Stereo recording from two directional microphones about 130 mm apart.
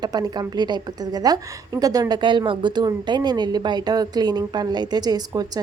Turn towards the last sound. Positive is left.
turn(degrees=-30)  # may be behind; listen again after turning